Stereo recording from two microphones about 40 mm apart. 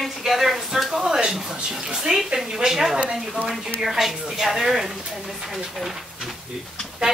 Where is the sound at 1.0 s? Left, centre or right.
Centre.